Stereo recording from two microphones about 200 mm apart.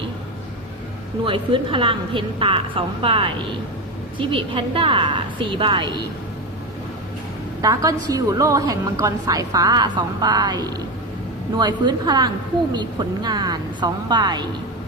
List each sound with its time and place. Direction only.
1.2 s a woman's voice: 25° right (ahead or behind)
7.6 s a woman's voice: 15° right (ahead or behind)